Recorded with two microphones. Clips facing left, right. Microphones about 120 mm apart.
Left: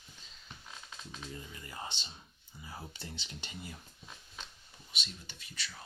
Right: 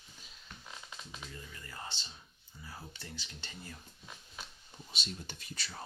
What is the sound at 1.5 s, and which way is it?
Speech, 15° left (ahead or behind).